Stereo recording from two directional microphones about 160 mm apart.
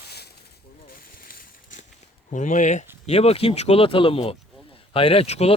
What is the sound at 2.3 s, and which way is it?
Speech, 50° left (ahead or behind).